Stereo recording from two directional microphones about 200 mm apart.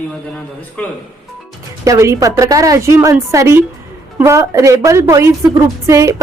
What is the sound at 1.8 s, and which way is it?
A woman's voice, 15° right (ahead or behind).